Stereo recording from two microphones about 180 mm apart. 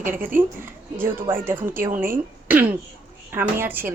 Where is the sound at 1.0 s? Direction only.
10° right (ahead or behind).